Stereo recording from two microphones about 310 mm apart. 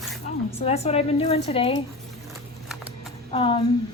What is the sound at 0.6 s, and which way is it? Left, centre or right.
A woman's voice, centre.